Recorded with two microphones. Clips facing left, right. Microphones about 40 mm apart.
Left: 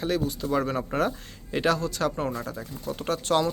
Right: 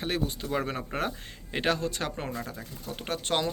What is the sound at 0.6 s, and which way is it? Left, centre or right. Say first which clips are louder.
Speech: left 5 dB; centre.